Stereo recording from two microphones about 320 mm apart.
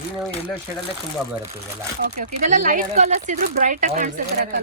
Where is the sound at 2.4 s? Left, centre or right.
Right.